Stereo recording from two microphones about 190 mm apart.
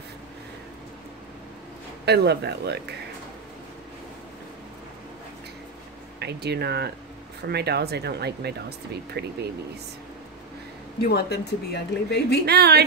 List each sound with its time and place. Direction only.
2.0 s speech: 60° right (ahead or behind)
6.1 s speech: 60° right (ahead or behind)
11.1 s speech: 60° left (ahead or behind)
12.4 s speech: 60° right (ahead or behind)